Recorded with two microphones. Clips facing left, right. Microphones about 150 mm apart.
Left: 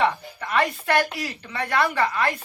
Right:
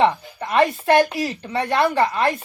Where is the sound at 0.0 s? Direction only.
25° right (ahead or behind).